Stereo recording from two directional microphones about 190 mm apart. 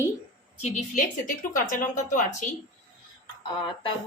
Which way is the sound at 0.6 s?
40° left (ahead or behind).